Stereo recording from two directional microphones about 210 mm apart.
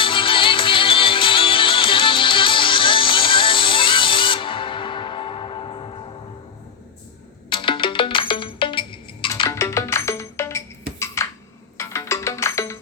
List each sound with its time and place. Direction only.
0.0 s music: 25° left (ahead or behind)
7.5 s music: 25° left (ahead or behind)
11.0 s a sound: 15° left (ahead or behind)
11.8 s music: 15° left (ahead or behind)